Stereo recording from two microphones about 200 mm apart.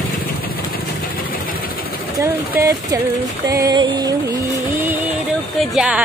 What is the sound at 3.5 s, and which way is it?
Music, 20° right (ahead or behind).